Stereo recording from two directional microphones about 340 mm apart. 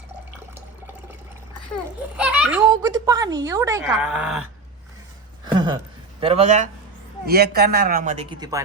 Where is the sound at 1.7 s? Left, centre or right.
Centre.